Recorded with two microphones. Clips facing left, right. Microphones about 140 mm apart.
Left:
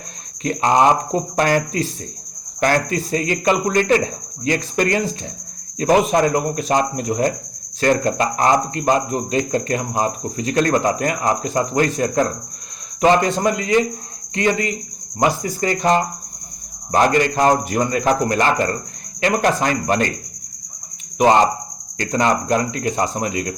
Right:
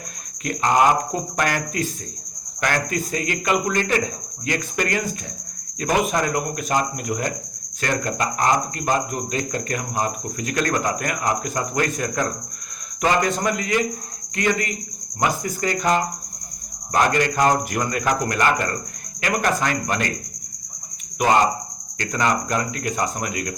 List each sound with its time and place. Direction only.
0.4 s speech: 25° left (ahead or behind)
21.9 s speech: 30° left (ahead or behind)